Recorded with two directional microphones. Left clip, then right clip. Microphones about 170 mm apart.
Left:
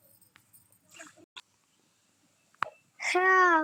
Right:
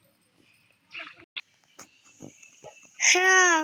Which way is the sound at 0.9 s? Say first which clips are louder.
Right 10 dB; 60° left (ahead or behind).